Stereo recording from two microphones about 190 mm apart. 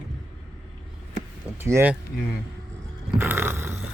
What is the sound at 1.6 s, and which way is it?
Speech, 10° right (ahead or behind).